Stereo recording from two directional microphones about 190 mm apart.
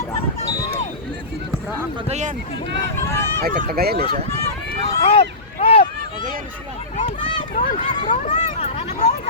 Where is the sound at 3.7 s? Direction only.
55° right (ahead or behind).